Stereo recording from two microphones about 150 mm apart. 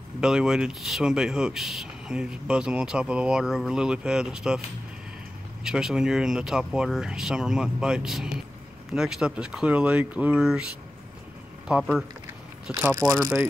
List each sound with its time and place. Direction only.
0.2 s speech: 5° right (ahead or behind)
5.6 s speech: 5° right (ahead or behind)
11.6 s speech: 5° right (ahead or behind)
13.2 s speech: 15° right (ahead or behind)